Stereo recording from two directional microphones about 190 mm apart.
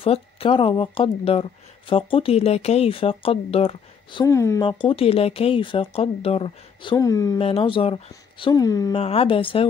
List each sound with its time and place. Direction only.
0.0 s speech: 30° left (ahead or behind)
4.6 s speech: 25° left (ahead or behind)
7.3 s speech: 30° left (ahead or behind)
8.9 s speech: 30° left (ahead or behind)